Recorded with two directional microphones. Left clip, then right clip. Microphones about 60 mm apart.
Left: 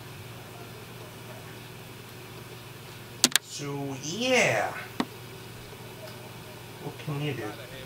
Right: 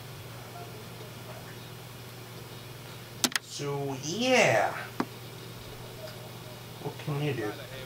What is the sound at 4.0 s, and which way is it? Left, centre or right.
Speech, left.